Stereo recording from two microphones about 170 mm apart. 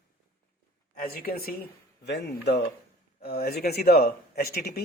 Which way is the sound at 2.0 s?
80° left.